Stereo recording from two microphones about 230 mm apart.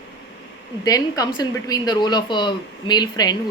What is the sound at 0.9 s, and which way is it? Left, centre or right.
A woman's voice, centre.